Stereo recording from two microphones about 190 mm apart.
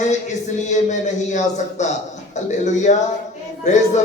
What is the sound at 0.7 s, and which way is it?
Speech, 40° left (ahead or behind).